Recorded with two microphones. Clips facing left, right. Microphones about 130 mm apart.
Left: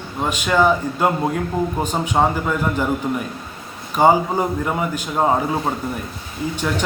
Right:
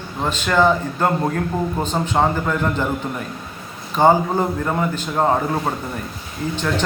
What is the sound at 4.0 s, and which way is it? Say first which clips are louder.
A man's voice: even; 10° left (ahead or behind).